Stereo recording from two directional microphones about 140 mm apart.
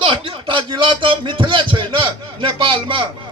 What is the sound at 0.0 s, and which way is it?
A man's voice, 40° right (ahead or behind).